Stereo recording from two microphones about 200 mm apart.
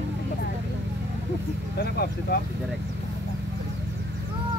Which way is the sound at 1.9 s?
50° left (ahead or behind).